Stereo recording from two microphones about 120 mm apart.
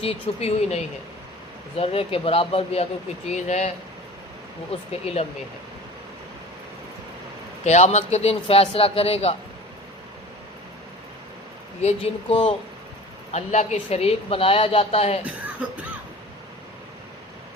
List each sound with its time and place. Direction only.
0.0 s a woman's voice: 55° left (ahead or behind)
1.7 s speech: 55° left (ahead or behind)
3.2 s speech: 75° left (ahead or behind)
4.7 s a woman's voice: 55° left (ahead or behind)
7.6 s a woman's voice: 70° left (ahead or behind); by 9.3 s 55° left (ahead or behind)
11.8 s a woman's voice: 60° left (ahead or behind)
13.3 s a woman's voice: 70° left (ahead or behind)